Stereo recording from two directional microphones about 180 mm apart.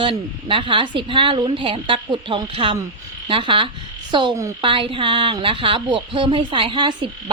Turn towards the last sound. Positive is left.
turn(degrees=-25)  # may be behind; listen again after turning